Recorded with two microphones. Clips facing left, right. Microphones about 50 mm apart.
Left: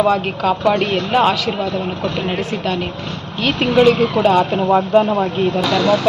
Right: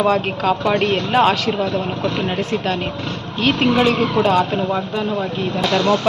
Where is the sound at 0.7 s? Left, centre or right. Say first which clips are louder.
Left 1 dB; centre.